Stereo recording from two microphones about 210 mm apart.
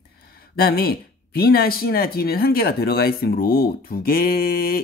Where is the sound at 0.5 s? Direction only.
45° left (ahead or behind).